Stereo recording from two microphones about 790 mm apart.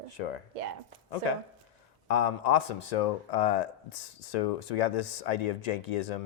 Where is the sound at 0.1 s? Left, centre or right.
Left.